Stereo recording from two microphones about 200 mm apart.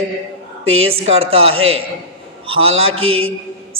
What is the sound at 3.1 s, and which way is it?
Speech, 90° right.